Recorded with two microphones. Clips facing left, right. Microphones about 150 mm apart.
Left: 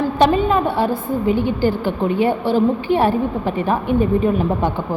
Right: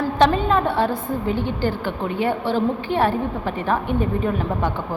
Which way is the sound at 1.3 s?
10° left (ahead or behind).